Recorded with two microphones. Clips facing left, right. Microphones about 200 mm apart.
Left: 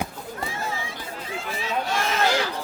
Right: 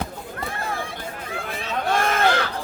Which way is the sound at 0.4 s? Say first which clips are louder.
Right 2 dB; 55° right (ahead or behind).